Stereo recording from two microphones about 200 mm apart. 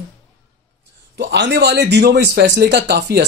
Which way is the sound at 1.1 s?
60° right (ahead or behind).